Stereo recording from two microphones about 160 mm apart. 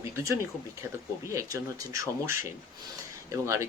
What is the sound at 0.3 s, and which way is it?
Speech, 15° right (ahead or behind).